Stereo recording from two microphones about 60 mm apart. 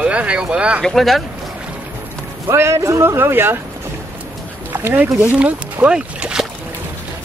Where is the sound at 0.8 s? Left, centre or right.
Centre.